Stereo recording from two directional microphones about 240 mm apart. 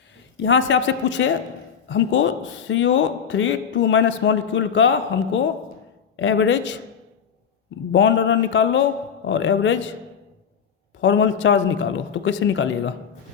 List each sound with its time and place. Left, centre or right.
0.4 s speech: left
6.1 s speech: left
7.9 s speech: left
11.0 s speech: left